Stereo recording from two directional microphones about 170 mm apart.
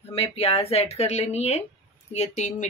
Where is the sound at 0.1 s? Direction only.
35° left (ahead or behind).